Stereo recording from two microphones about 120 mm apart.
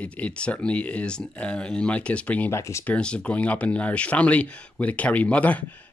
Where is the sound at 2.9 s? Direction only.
10° left (ahead or behind).